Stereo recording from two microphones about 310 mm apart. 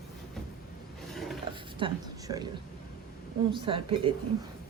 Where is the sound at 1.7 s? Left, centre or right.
Centre.